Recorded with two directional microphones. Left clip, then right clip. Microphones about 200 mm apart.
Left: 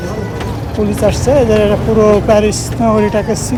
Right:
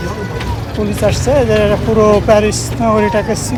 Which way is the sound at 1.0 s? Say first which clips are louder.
Left 1 dB; 15° left (ahead or behind).